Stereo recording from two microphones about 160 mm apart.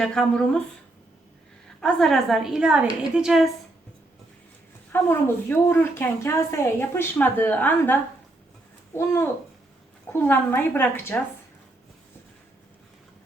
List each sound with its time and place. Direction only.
0.0 s a woman's voice: 5° left (ahead or behind)
1.8 s a woman's voice: centre (ahead or behind)
4.9 s a woman's voice: 15° left (ahead or behind)